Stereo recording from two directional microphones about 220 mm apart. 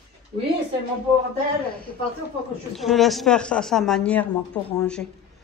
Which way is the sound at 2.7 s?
Centre (ahead or behind).